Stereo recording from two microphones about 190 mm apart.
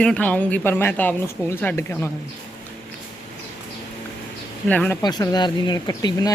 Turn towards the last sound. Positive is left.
turn(degrees=20)  # may be behind; listen again after turning